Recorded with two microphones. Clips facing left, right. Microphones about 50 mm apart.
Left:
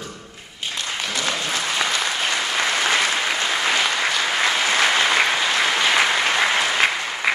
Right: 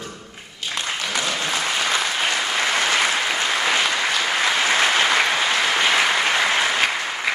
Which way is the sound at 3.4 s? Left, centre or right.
Centre.